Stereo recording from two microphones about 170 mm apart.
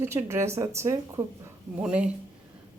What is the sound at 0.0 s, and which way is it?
Speech, 15° right (ahead or behind).